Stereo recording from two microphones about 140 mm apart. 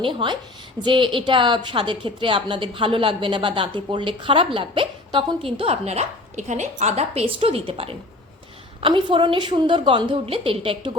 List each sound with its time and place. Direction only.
0.0 s a woman's voice: 35° right (ahead or behind)